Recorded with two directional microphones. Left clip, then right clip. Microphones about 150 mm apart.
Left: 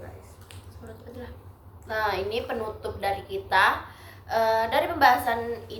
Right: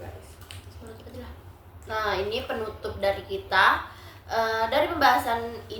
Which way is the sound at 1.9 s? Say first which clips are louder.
Even; 20° left (ahead or behind).